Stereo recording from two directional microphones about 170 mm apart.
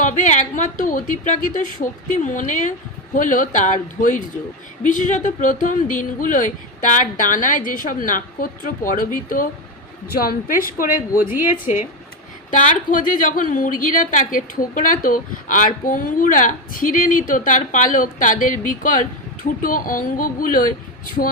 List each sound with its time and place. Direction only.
0.0 s a woman's voice: 45° left (ahead or behind)
11.2 s a woman's voice: 15° right (ahead or behind)
11.5 s a woman's voice: 50° left (ahead or behind)